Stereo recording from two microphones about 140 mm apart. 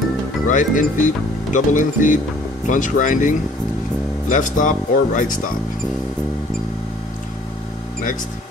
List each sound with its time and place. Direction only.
0.5 s speech: 65° left (ahead or behind)